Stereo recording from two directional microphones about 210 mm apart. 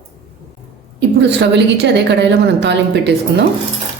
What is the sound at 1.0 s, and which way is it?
A woman's voice, 55° right (ahead or behind).